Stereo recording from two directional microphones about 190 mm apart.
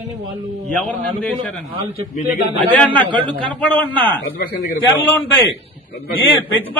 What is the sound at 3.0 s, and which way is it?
Speech, 25° right (ahead or behind).